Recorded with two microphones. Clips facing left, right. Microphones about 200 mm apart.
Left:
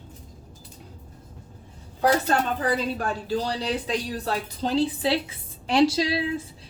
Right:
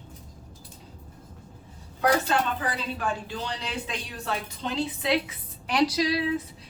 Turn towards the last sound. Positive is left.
turn(degrees=30)  # may be behind; listen again after turning